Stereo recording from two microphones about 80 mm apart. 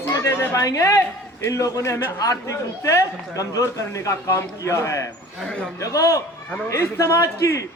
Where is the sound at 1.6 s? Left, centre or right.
Left.